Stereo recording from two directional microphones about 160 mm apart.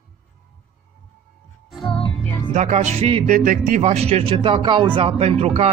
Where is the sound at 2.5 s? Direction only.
45° right (ahead or behind).